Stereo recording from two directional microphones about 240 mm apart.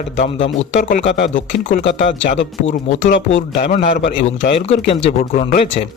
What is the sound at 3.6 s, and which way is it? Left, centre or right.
A man's voice, left.